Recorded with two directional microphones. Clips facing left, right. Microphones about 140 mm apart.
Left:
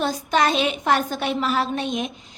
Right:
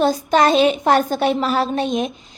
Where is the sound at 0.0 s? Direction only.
35° right (ahead or behind).